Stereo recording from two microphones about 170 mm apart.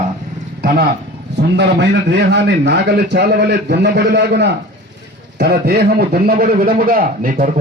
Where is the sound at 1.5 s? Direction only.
85° right.